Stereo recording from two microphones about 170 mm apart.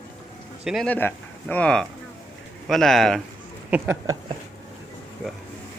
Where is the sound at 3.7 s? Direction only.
10° right (ahead or behind).